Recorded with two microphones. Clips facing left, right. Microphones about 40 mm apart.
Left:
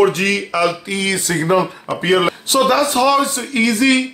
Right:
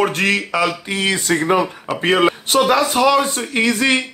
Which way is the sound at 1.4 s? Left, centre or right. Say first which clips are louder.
Left 3 dB; right.